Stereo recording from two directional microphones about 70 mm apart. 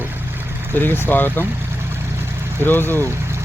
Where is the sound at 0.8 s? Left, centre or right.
Left.